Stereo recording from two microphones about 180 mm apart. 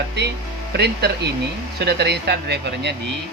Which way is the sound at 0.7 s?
65° right (ahead or behind).